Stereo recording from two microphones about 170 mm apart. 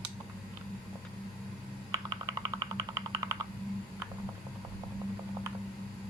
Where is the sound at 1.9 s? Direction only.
20° right (ahead or behind).